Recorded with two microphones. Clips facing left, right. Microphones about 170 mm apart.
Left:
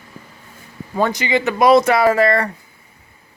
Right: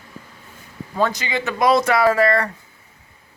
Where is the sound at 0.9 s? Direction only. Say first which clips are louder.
Left 3 dB; 15° left (ahead or behind).